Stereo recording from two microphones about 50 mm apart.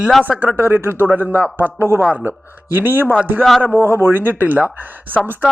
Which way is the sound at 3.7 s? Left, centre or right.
Left.